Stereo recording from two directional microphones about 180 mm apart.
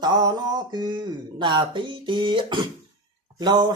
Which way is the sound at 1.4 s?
25° right (ahead or behind).